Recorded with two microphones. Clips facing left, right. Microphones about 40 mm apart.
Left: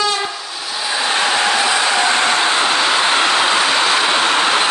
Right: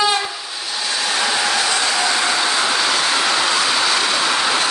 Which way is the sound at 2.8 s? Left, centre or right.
Left.